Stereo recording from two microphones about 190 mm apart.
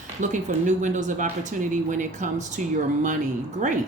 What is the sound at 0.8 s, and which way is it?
Speech, 40° right (ahead or behind).